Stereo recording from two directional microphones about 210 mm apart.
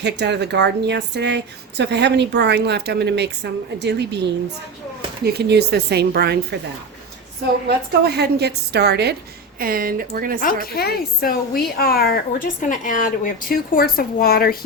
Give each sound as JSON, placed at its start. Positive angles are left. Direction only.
{"t": 0.0, "sound": "speech", "side_deg": -55}
{"t": 7.7, "sound": "speech", "side_deg": -50}
{"t": 10.4, "sound": "a woman's voice", "side_deg": 45}